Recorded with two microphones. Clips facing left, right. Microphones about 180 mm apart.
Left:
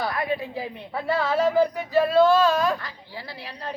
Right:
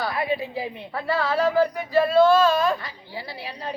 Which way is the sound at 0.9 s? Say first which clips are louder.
Left 1 dB; 20° left (ahead or behind).